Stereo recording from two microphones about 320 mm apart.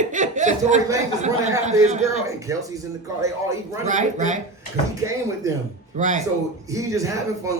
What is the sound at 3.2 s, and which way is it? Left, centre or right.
Speech, centre.